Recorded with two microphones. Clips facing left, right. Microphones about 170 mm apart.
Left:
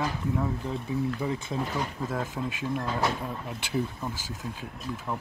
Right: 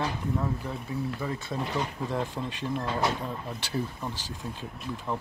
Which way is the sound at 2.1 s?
5° left (ahead or behind).